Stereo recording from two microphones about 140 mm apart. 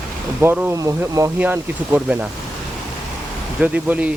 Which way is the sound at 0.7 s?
25° right (ahead or behind).